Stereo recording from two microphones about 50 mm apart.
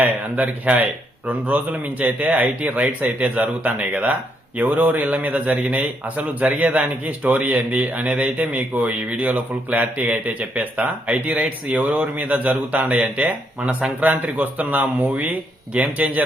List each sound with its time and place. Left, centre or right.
0.0 s speech: right
7.7 s speech: right
11.1 s speech: centre